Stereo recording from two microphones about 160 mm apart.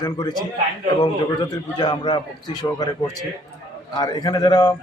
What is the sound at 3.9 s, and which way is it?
Speech, 25° left (ahead or behind).